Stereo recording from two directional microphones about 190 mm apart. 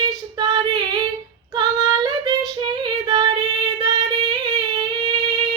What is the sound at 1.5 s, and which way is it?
Child singing, 20° right (ahead or behind).